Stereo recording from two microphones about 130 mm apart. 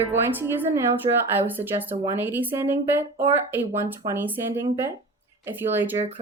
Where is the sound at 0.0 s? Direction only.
15° right (ahead or behind).